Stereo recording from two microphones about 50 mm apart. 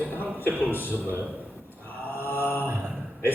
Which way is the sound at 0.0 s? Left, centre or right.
Left.